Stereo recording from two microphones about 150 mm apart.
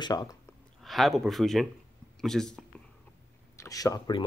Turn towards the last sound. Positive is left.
turn(degrees=25)  # may be behind; listen again after turning